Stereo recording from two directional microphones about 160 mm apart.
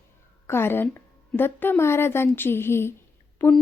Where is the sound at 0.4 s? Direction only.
15° left (ahead or behind).